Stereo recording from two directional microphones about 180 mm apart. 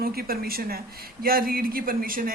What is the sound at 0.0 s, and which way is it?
A woman's voice, 55° right (ahead or behind).